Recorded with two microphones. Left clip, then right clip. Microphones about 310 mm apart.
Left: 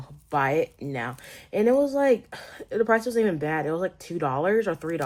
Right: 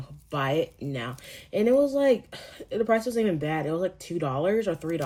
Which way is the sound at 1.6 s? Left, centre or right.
Left.